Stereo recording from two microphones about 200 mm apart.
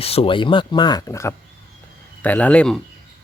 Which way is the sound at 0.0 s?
30° left (ahead or behind).